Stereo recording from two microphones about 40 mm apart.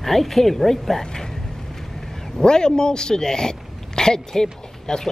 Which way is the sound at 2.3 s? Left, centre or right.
Centre.